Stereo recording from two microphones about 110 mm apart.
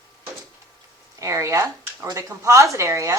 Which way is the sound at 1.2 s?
30° right (ahead or behind).